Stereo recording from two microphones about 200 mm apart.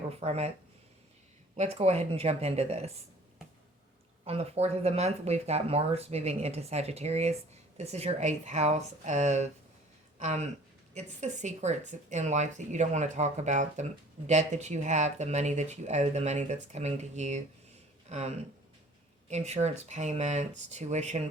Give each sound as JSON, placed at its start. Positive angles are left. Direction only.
{"t": 0.1, "sound": "speech", "side_deg": -30}
{"t": 1.5, "sound": "speech", "side_deg": -30}
{"t": 4.3, "sound": "speech", "side_deg": -30}